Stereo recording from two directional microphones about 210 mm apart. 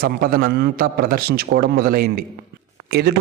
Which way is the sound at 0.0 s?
45° right (ahead or behind).